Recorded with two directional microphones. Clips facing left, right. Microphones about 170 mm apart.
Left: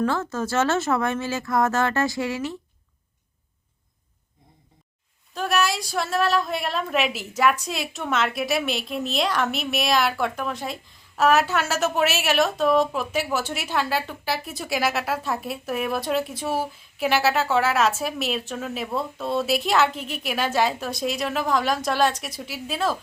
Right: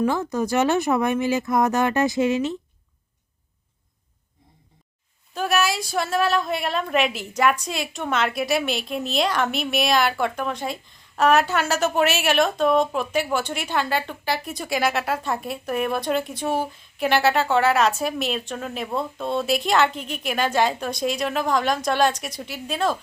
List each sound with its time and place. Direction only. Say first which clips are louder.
0.0 s speech: right 2 dB; 15° right (ahead or behind)
5.3 s speech: right 1 dB; centre (ahead or behind)